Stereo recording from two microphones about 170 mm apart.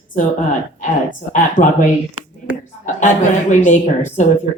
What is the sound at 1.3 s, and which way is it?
Speech, 50° left (ahead or behind).